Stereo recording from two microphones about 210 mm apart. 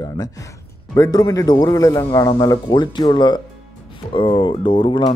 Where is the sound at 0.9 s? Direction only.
15° left (ahead or behind).